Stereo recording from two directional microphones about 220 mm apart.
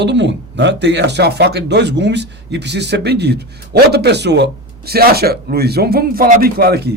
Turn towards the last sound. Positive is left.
turn(degrees=-45)  # may be behind; listen again after turning